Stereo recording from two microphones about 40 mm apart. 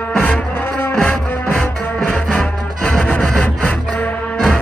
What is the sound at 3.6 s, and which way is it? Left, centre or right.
Music, left.